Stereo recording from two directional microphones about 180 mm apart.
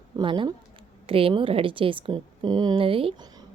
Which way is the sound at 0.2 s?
25° right (ahead or behind).